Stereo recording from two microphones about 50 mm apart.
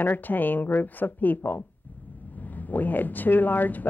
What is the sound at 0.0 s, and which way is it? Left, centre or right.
Speech, left.